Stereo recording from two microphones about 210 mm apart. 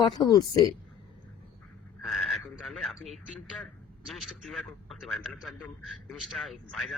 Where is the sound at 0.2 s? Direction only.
20° left (ahead or behind).